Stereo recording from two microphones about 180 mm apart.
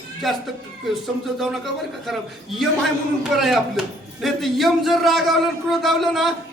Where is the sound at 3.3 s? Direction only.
Centre (ahead or behind).